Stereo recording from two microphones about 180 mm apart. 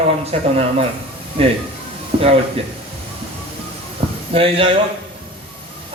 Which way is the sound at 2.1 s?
30° right (ahead or behind).